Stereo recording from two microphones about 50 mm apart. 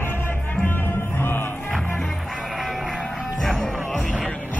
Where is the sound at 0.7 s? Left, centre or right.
Left.